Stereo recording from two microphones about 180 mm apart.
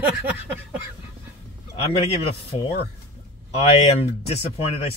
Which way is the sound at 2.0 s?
30° left (ahead or behind).